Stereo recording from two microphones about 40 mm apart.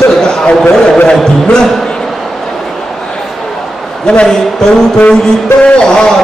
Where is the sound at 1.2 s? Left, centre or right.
Centre.